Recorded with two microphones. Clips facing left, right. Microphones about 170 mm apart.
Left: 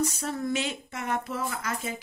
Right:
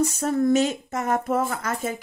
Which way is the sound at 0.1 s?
50° right (ahead or behind).